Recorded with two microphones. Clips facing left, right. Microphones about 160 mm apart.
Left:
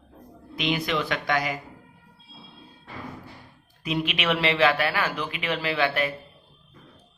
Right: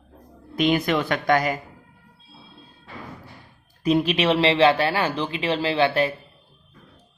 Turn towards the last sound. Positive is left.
turn(degrees=-30)  # may be behind; listen again after turning